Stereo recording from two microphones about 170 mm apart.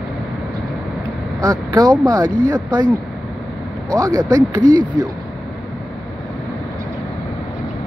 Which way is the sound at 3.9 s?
20° right (ahead or behind).